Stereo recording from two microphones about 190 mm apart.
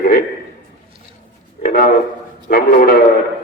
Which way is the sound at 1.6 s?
45° left (ahead or behind).